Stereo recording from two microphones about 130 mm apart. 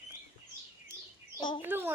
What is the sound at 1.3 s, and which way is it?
Speech, 40° left (ahead or behind).